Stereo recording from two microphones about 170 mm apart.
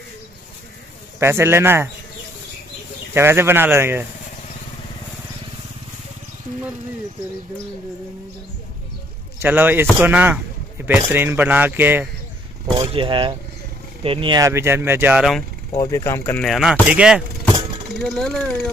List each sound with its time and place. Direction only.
1.2 s speech: 15° right (ahead or behind)
3.2 s speech: 15° right (ahead or behind)
9.4 s speech: 10° right (ahead or behind)
12.7 s speech: 30° right (ahead or behind)
14.4 s speech: 15° right (ahead or behind)
15.8 s speech: 15° left (ahead or behind)
16.4 s speech: centre (ahead or behind)